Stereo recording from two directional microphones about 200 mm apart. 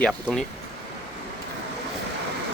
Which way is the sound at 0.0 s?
5° left (ahead or behind).